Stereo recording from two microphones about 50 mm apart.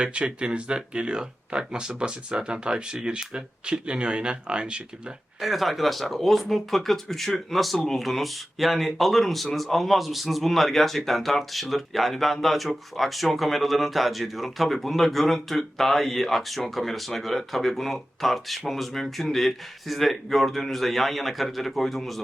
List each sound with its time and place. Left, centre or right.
0.0 s speech: right
5.4 s speech: centre